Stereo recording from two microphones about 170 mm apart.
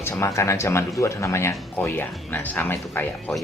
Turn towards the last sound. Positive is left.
turn(degrees=10)  # may be behind; listen again after turning